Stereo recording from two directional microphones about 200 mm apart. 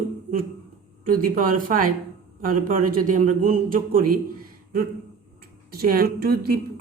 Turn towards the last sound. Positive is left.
turn(degrees=-50)  # may be behind; listen again after turning